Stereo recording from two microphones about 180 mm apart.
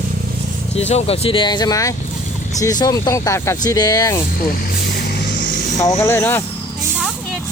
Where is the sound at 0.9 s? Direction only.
35° left (ahead or behind); by 4.2 s 20° left (ahead or behind).